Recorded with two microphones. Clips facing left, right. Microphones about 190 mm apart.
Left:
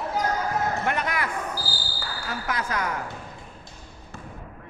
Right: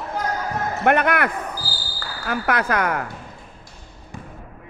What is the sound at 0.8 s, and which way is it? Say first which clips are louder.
Speech: right 9 dB; 60° right (ahead or behind).